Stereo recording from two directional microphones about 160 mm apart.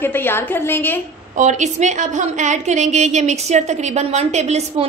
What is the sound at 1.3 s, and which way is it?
A woman's voice, 50° right (ahead or behind).